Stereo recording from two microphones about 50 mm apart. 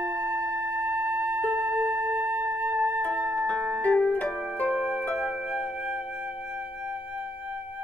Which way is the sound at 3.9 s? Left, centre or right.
Centre.